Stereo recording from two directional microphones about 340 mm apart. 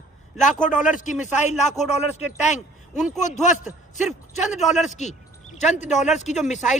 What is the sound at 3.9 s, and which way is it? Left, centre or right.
Speech, left.